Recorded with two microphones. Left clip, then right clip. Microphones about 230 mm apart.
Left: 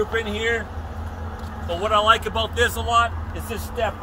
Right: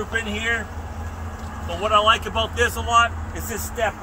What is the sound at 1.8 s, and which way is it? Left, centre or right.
Speech, centre.